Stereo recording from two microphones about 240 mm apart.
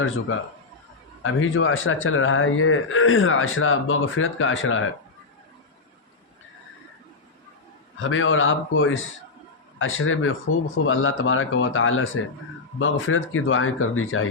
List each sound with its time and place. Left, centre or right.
1.2 s a man's voice: left
7.9 s a man's voice: left